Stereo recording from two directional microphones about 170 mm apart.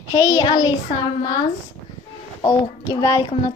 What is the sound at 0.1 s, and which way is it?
Speech, 20° left (ahead or behind).